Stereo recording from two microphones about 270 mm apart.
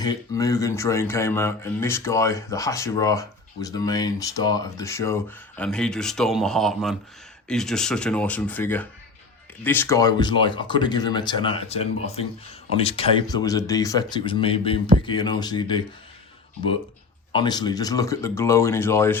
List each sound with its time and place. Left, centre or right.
0.0 s speech: centre
17.3 s speech: centre